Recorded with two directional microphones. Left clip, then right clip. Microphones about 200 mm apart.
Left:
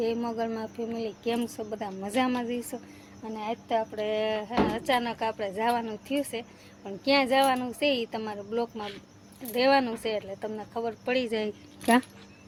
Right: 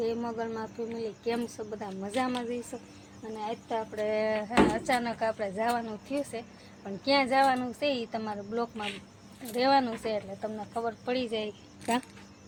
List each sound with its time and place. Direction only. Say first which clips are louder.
0.0 s speech: left 3 dB; 10° left (ahead or behind); by 11.5 s 25° left (ahead or behind)